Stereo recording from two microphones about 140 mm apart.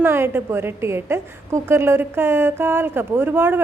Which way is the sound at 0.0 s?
15° right (ahead or behind).